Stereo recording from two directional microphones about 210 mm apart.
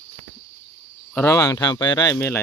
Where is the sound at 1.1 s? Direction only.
10° left (ahead or behind).